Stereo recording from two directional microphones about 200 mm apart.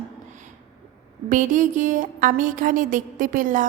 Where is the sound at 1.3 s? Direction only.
40° right (ahead or behind).